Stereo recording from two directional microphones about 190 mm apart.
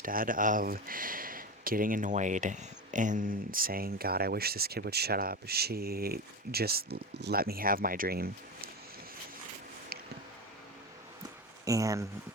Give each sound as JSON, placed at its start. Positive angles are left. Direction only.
{"t": 0.0, "sound": "speech", "side_deg": -45}
{"t": 11.6, "sound": "speech", "side_deg": -15}